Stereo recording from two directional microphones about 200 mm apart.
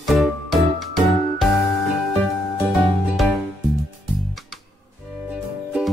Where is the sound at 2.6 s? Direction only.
Centre (ahead or behind).